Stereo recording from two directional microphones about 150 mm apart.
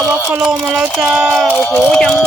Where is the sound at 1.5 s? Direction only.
10° left (ahead or behind).